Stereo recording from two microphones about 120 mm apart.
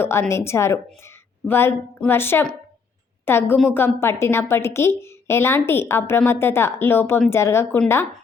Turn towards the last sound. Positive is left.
turn(degrees=20)  # may be behind; listen again after turning